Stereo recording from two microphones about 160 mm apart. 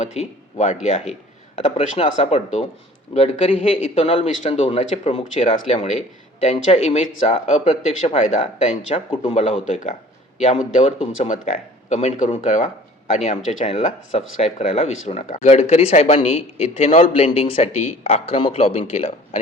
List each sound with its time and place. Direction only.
0.0 s speech: 40° left (ahead or behind)